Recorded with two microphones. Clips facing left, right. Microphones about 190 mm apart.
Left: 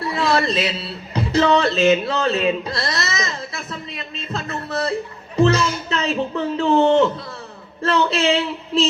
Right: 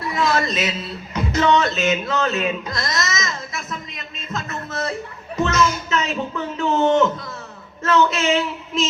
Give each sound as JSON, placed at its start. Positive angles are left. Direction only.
{"t": 0.1, "sound": "a sound", "side_deg": 30}
{"t": 5.4, "sound": "speech", "side_deg": 35}
{"t": 7.8, "sound": "female singing", "side_deg": 35}